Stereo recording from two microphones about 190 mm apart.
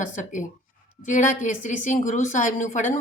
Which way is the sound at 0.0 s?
40° left (ahead or behind).